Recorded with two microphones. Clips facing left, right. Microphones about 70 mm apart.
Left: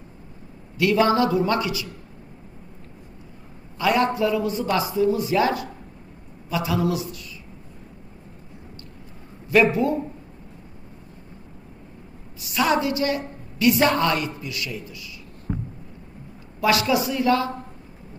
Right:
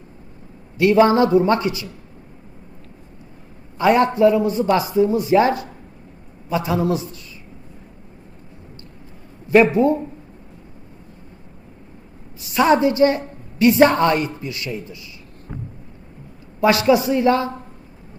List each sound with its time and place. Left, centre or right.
0.8 s a woman's voice: right
3.8 s a woman's voice: right
9.5 s a woman's voice: right
12.5 s a woman's voice: right
16.6 s a woman's voice: right